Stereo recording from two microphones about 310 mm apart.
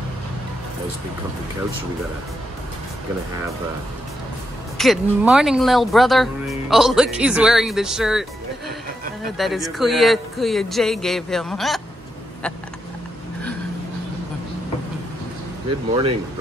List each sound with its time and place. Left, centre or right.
4.7 s speech: centre
15.9 s speech: centre